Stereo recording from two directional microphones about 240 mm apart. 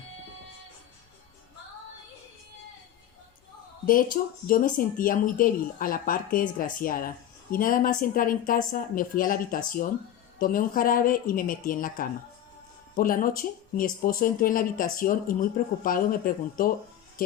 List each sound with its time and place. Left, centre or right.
3.8 s speech: left